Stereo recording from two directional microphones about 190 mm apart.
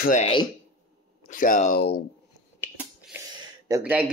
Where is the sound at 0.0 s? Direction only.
40° left (ahead or behind).